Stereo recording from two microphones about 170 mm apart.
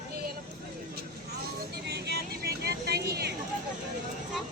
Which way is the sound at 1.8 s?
70° right (ahead or behind).